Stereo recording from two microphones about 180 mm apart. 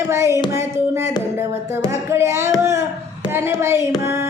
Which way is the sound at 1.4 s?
15° right (ahead or behind).